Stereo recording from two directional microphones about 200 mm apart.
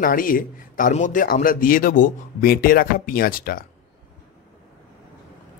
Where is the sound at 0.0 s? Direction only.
45° left (ahead or behind).